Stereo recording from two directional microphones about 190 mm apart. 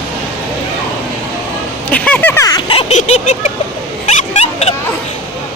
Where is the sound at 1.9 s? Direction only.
10° left (ahead or behind).